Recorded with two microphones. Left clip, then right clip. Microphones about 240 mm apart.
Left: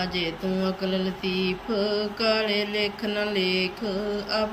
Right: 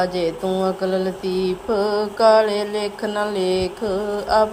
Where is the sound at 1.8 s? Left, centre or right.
Right.